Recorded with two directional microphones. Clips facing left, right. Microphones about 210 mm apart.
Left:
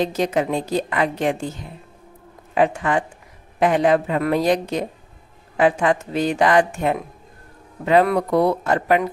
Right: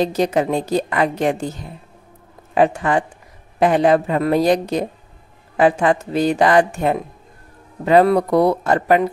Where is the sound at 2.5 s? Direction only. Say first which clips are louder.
Right 3 dB; 35° right (ahead or behind).